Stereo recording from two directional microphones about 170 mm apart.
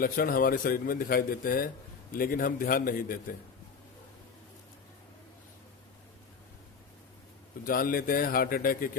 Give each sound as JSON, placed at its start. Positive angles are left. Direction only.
{"t": 0.0, "sound": "a man's voice", "side_deg": 60}
{"t": 7.6, "sound": "a man's voice", "side_deg": 55}